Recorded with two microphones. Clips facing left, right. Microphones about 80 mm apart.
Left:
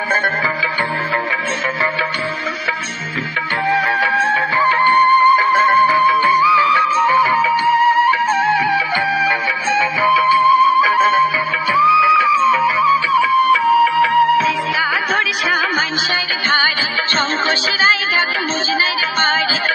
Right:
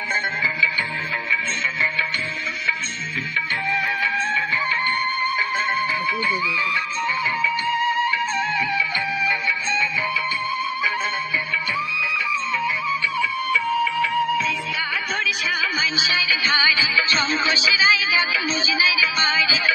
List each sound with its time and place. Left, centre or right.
3.7 s music: left
16.2 s music: left